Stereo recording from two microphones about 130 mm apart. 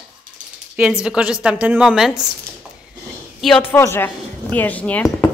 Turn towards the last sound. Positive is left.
turn(degrees=10)  # may be behind; listen again after turning